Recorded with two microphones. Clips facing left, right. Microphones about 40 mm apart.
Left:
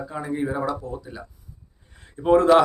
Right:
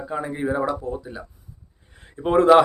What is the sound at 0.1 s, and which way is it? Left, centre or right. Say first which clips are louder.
Speech: right 3 dB; right.